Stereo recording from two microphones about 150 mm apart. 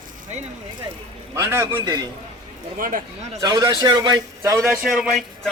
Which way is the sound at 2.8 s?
65° right (ahead or behind).